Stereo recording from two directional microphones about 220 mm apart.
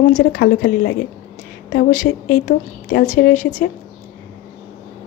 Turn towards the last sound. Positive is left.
turn(degrees=40)  # may be behind; listen again after turning